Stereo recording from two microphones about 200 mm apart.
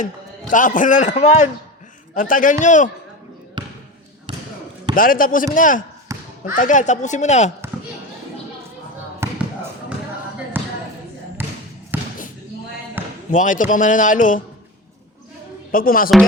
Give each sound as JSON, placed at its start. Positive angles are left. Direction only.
{"t": 0.5, "sound": "speech", "side_deg": 40}
{"t": 3.6, "sound": "basketball bounce", "side_deg": -20}
{"t": 4.9, "sound": "speech", "side_deg": 45}
{"t": 9.2, "sound": "basketball bounce", "side_deg": -15}
{"t": 10.5, "sound": "basketball bounce", "side_deg": -10}
{"t": 13.3, "sound": "speech", "side_deg": 40}
{"t": 15.7, "sound": "speech", "side_deg": 45}